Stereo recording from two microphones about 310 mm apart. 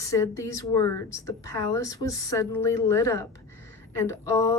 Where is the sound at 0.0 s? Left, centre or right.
Centre.